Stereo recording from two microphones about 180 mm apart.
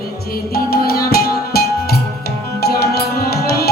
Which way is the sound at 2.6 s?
60° left (ahead or behind).